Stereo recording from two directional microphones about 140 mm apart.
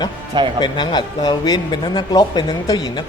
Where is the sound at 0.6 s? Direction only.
35° left (ahead or behind).